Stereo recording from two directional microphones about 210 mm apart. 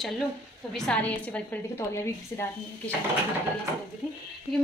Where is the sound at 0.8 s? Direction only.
5° left (ahead or behind).